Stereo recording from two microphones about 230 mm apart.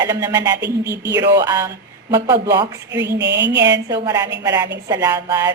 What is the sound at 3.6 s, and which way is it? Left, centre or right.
Speech, centre.